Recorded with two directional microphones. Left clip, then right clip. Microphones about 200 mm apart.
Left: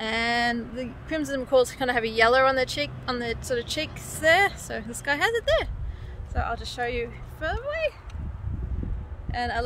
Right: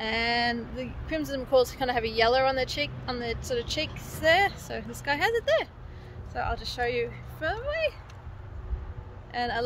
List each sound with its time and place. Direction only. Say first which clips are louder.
0.0 s speech: left 2 dB; 25° left (ahead or behind)
9.3 s speech: left 1 dB; 20° left (ahead or behind)